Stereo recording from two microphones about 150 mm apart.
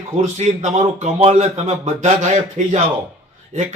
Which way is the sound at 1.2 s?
45° right (ahead or behind).